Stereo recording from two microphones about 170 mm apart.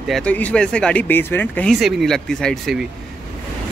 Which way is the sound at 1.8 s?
Centre (ahead or behind).